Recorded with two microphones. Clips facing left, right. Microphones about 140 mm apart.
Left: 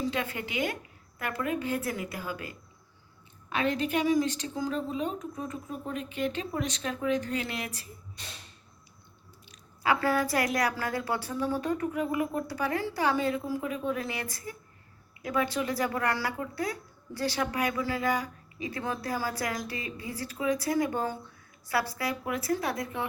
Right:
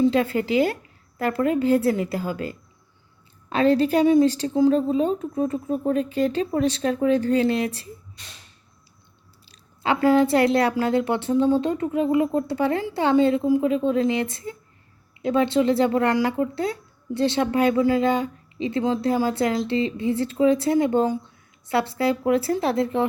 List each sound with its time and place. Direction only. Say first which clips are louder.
0.1 s a woman's voice: right 12 dB; 30° right (ahead or behind)
9.5 s a woman's voice: right 4 dB; 25° right (ahead or behind)